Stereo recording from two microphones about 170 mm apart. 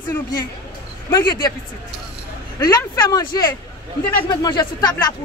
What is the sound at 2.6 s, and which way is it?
A woman's voice, 20° left (ahead or behind).